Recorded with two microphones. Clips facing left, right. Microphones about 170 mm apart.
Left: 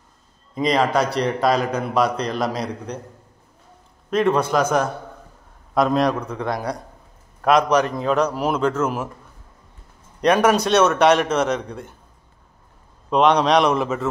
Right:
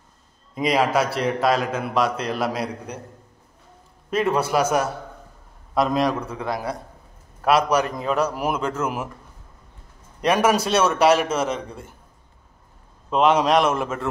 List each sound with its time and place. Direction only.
0.6 s a man's voice: 5° right (ahead or behind)
4.1 s a man's voice: 5° right (ahead or behind)
10.2 s a man's voice: 5° right (ahead or behind)
13.1 s a man's voice: 5° right (ahead or behind)